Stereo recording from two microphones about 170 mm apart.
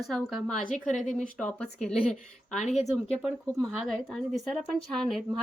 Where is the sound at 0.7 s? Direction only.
45° left (ahead or behind).